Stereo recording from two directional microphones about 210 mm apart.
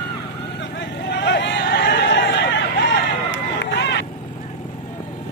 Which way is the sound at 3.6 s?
55° left (ahead or behind).